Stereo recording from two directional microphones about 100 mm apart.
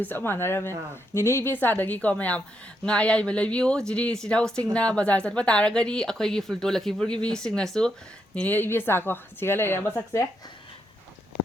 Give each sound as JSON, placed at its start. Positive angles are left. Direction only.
{"t": 0.0, "sound": "a woman's voice", "side_deg": 20}
{"t": 8.4, "sound": "a woman's voice", "side_deg": 20}